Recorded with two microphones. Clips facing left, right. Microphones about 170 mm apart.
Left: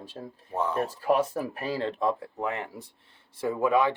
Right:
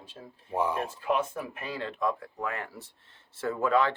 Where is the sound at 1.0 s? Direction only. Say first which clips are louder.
Left 6 dB; 35° left (ahead or behind); by 4.0 s 15° left (ahead or behind).